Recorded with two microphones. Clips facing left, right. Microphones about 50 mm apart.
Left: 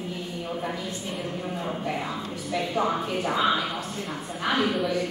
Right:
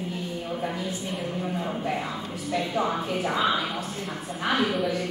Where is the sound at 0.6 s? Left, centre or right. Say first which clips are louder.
Right 1 dB; centre.